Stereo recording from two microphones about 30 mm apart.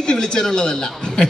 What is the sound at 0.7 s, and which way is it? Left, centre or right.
Speech, centre.